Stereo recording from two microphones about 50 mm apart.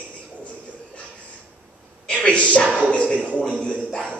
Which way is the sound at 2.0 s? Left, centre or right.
Centre.